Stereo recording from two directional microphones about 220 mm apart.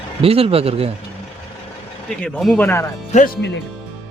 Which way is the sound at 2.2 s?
Centre (ahead or behind).